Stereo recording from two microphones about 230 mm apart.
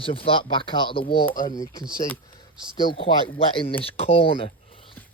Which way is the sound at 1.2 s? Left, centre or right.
Left.